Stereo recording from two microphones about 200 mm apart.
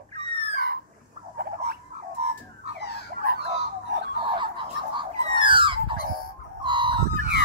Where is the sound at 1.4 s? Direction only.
55° right (ahead or behind).